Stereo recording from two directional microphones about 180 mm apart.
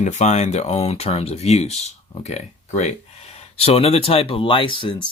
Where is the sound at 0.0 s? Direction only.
40° left (ahead or behind).